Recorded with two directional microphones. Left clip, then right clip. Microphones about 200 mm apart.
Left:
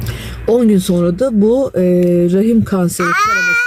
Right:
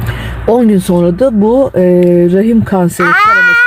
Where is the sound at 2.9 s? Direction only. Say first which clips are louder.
Right 6 dB; 45° left (ahead or behind).